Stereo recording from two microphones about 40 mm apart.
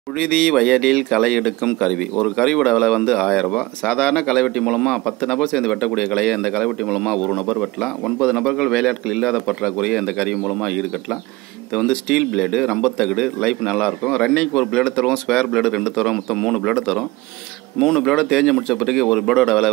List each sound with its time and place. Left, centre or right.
0.1 s a man's voice: centre
0.7 s a man's voice: centre
8.4 s speech: centre
8.6 s a man's voice: centre
17.8 s a man's voice: centre